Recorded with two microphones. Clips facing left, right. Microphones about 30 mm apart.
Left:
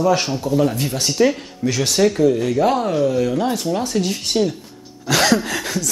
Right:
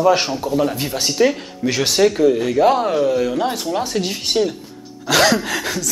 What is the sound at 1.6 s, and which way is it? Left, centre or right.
Speech, right.